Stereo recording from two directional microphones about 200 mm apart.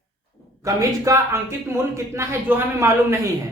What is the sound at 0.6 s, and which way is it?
A man's voice, 15° right (ahead or behind).